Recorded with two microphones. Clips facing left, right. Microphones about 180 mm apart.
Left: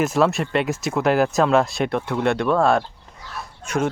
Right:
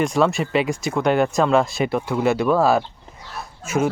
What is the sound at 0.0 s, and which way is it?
Speech, centre (ahead or behind).